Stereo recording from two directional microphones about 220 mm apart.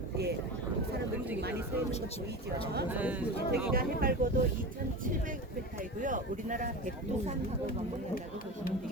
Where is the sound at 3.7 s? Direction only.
40° right (ahead or behind).